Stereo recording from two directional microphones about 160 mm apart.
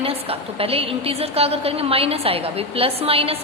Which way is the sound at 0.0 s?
35° right (ahead or behind).